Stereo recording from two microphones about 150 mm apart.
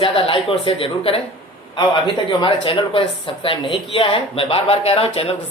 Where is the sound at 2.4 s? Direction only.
35° left (ahead or behind).